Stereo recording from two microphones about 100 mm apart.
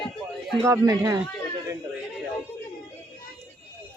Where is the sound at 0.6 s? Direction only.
30° right (ahead or behind).